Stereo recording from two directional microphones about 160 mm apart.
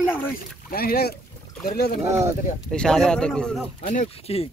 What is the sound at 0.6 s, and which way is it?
Speech, 70° left (ahead or behind).